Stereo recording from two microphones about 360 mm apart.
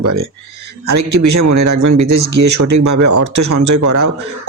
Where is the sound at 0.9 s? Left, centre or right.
Right.